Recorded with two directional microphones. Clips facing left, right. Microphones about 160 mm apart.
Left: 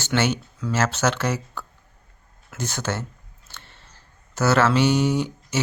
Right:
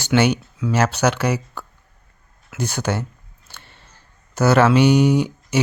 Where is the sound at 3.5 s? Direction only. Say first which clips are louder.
Right 1 dB; 15° right (ahead or behind).